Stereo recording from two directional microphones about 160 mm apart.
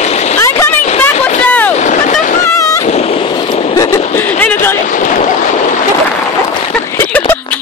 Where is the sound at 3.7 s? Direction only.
20° left (ahead or behind).